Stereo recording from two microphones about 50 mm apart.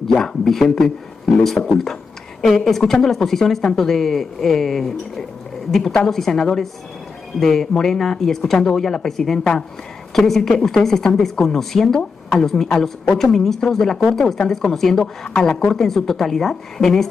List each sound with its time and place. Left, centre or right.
0.0 s speech: centre